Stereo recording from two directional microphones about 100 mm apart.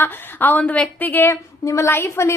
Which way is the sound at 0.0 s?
20° left (ahead or behind).